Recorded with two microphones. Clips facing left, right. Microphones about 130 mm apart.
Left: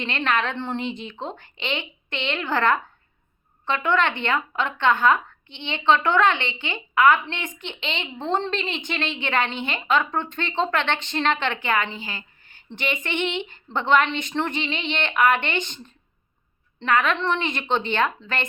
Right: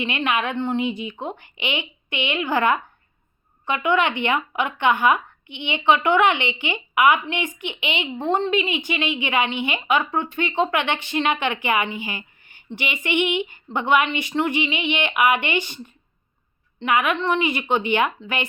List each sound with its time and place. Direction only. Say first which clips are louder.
0.0 s speech: right 1 dB; 10° right (ahead or behind)